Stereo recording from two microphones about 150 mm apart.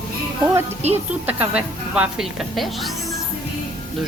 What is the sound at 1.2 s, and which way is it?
Speech, 10° right (ahead or behind).